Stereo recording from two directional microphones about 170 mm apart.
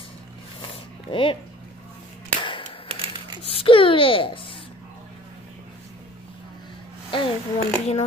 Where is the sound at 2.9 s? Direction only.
30° right (ahead or behind).